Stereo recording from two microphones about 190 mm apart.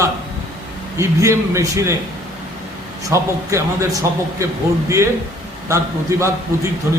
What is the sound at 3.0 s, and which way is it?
A man's voice, 15° right (ahead or behind).